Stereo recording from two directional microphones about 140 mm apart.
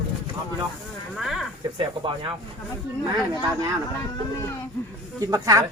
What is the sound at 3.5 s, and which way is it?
Speech, 25° right (ahead or behind).